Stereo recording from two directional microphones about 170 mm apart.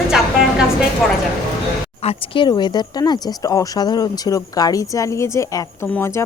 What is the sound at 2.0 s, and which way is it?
A woman's voice, 35° left (ahead or behind).